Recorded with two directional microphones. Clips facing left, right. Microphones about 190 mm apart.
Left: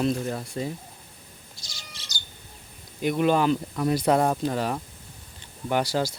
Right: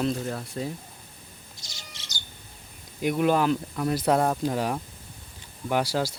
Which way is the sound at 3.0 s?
5° right (ahead or behind).